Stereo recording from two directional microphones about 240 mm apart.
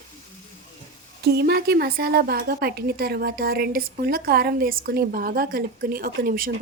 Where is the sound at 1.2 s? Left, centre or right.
Right.